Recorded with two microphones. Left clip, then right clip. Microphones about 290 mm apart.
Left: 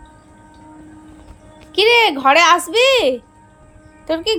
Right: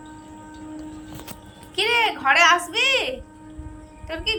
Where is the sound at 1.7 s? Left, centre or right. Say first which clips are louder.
Left 8 dB; centre.